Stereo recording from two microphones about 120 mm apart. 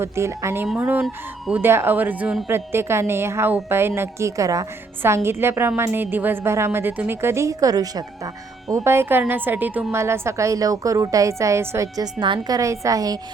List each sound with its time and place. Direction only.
0.0 s a woman's voice: 25° right (ahead or behind); by 1.6 s 10° right (ahead or behind)
1.6 s a woman's voice: 20° right (ahead or behind)
8.7 s a woman's voice: 20° right (ahead or behind)
12.2 s a woman's voice: 40° right (ahead or behind)
12.5 s a woman's voice: 25° right (ahead or behind)